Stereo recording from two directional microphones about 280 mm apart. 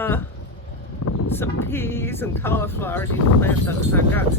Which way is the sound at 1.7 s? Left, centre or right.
Centre.